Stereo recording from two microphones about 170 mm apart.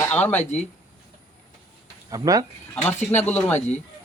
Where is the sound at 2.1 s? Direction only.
20° right (ahead or behind).